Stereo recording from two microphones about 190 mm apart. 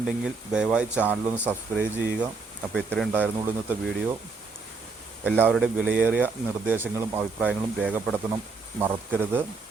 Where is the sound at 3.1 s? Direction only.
10° right (ahead or behind).